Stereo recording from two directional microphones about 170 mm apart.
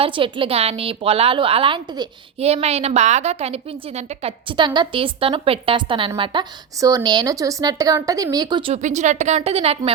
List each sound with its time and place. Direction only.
0.0 s a woman's voice: 30° right (ahead or behind)
2.4 s a woman's voice: 40° right (ahead or behind)
8.7 s a woman's voice: 45° right (ahead or behind)